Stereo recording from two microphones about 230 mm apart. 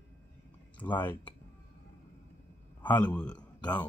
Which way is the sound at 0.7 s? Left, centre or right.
Centre.